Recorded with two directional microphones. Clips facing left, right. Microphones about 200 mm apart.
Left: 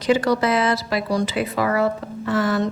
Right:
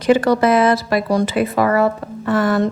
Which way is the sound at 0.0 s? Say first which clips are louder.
Right 5 dB; 55° right (ahead or behind).